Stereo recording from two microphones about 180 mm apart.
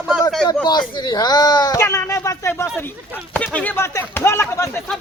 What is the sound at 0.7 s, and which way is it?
Speech, 25° left (ahead or behind).